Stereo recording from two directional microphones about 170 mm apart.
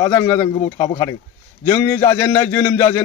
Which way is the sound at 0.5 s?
25° left (ahead or behind).